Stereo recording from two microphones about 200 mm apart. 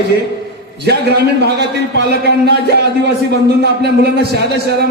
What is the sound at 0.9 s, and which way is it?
A man's voice, 55° right (ahead or behind).